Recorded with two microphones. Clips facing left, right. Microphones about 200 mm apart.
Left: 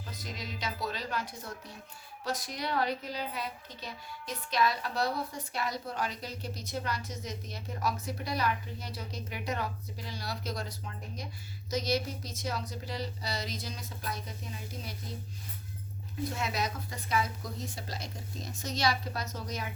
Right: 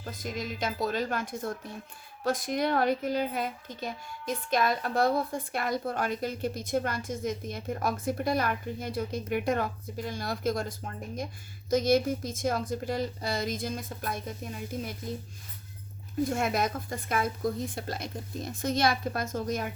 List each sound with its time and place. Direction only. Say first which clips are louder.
0.0 s a woman's voice: right 7 dB; 50° right (ahead or behind)
16.2 s a woman's voice: right 6 dB; 50° right (ahead or behind)